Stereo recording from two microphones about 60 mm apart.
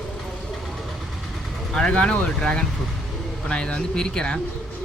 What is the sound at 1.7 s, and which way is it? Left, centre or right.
Speech, centre.